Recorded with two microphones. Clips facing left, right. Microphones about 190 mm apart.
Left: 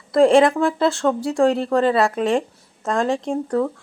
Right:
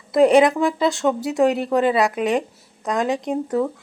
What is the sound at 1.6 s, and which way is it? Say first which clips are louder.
Speech: left 1 dB; 15° right (ahead or behind).